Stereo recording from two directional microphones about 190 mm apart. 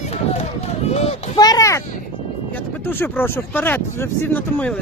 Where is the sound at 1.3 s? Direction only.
20° left (ahead or behind).